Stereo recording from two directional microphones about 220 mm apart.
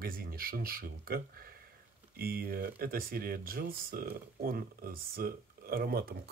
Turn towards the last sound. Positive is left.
turn(degrees=-45)  # may be behind; listen again after turning